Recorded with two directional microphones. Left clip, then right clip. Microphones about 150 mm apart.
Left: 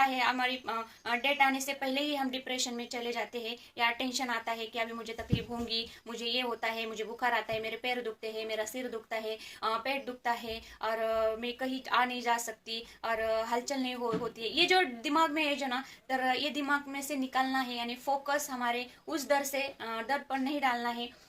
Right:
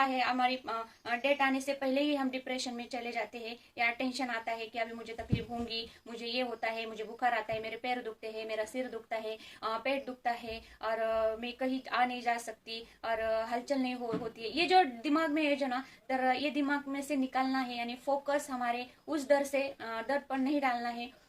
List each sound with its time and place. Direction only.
0.2 s a woman's voice: 25° right (ahead or behind)
6.2 s a woman's voice: 25° right (ahead or behind)